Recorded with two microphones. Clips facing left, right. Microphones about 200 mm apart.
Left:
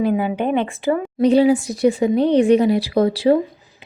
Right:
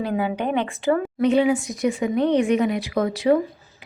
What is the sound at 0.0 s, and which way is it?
A woman's voice, 15° left (ahead or behind).